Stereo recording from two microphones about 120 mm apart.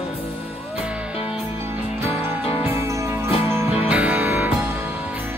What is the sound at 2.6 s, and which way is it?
Music, 25° right (ahead or behind).